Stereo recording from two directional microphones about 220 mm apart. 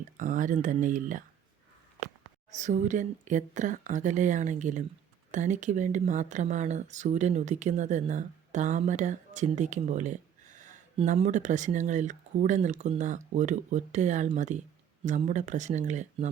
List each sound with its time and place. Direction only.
0.2 s speech: 35° right (ahead or behind)
2.6 s speech: 35° right (ahead or behind)